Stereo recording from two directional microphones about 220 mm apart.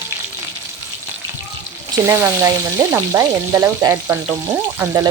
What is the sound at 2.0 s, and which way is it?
Frying, 15° right (ahead or behind).